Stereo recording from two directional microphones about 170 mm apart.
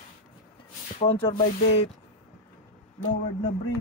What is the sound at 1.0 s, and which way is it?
Speech, 30° left (ahead or behind).